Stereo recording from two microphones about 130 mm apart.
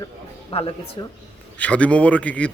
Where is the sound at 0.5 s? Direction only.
45° left (ahead or behind).